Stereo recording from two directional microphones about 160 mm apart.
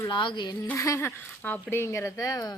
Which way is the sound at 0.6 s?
15° left (ahead or behind).